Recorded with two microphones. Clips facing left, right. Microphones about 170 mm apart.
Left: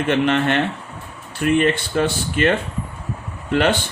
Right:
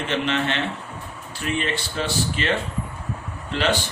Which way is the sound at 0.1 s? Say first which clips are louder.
Left 7 dB; 55° left (ahead or behind).